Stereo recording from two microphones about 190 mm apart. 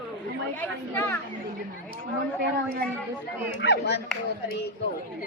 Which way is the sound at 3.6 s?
65° left (ahead or behind).